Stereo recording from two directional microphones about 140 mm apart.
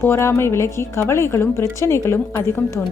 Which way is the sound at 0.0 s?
20° left (ahead or behind).